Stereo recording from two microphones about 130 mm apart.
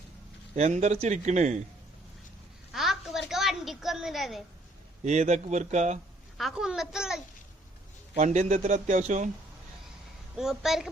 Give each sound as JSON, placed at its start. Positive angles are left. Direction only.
{"t": 0.5, "sound": "speech", "side_deg": -60}
{"t": 2.7, "sound": "a sound", "side_deg": 0}
{"t": 5.0, "sound": "speech", "side_deg": -60}
{"t": 6.3, "sound": "a woman's voice", "side_deg": 0}
{"t": 8.1, "sound": "a man's voice", "side_deg": -65}
{"t": 10.3, "sound": "a woman's voice", "side_deg": -5}